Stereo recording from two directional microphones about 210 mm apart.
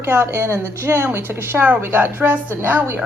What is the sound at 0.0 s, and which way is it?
Speech, 10° right (ahead or behind).